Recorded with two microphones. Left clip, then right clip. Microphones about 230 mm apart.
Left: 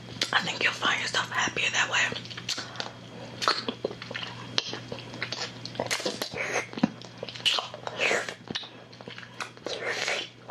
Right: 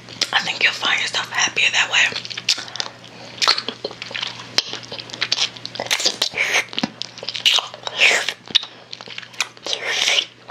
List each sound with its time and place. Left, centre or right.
0.2 s speech: centre
3.3 s a sound: centre
5.2 s biting: centre
9.4 s whispering: centre